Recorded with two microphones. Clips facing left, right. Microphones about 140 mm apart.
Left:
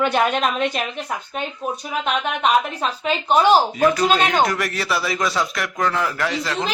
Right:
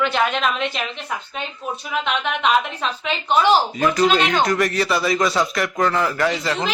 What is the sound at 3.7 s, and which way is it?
A man's voice, centre (ahead or behind).